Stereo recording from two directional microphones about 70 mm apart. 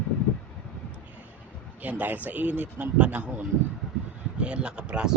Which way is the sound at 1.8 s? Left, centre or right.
Right.